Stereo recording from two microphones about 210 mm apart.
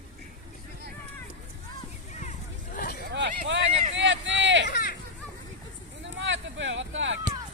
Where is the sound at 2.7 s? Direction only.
40° left (ahead or behind).